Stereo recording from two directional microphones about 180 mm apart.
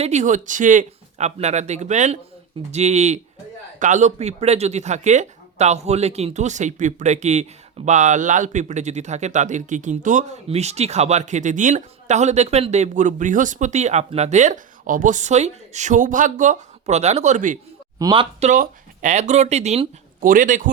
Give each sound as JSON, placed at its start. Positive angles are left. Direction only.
{"t": 0.0, "sound": "speech", "side_deg": -40}
{"t": 18.0, "sound": "speech", "side_deg": -25}
{"t": 18.4, "sound": "speech", "side_deg": -45}
{"t": 20.2, "sound": "speech", "side_deg": -45}